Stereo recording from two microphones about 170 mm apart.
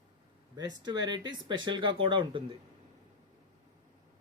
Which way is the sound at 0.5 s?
25° right (ahead or behind).